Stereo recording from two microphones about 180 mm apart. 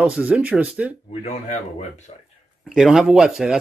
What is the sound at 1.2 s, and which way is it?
Speech, 40° left (ahead or behind).